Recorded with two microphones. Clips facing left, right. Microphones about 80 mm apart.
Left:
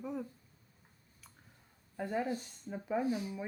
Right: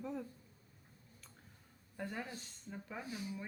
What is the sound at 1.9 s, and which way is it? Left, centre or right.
Speech, centre.